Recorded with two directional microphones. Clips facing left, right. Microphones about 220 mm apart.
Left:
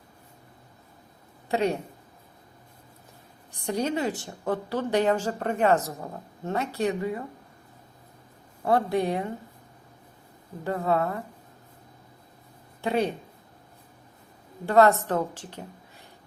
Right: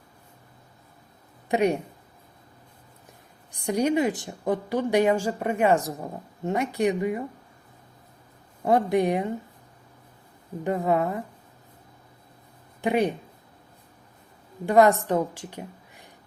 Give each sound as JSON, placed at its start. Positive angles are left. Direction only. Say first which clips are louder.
{"t": 1.5, "sound": "a woman's voice", "louder": "right 3 dB", "side_deg": -15}
{"t": 3.5, "sound": "a woman's voice", "louder": "right 4 dB", "side_deg": -15}
{"t": 8.6, "sound": "a woman's voice", "louder": "right 3 dB", "side_deg": -15}
{"t": 10.6, "sound": "a woman's voice", "louder": "right 2 dB", "side_deg": -15}
{"t": 12.8, "sound": "a woman's voice", "louder": "right 2 dB", "side_deg": -15}
{"t": 14.7, "sound": "a woman's voice", "louder": "right 1 dB", "side_deg": -15}